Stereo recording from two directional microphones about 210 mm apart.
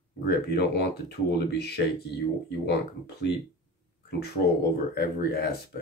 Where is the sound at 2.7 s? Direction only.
55° left (ahead or behind).